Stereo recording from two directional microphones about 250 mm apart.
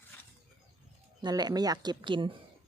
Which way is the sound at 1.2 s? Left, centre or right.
Centre.